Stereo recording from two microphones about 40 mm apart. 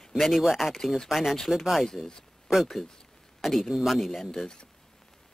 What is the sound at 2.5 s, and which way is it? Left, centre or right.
Speech, centre.